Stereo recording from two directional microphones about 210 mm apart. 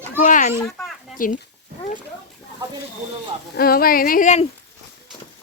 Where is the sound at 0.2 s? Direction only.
35° left (ahead or behind).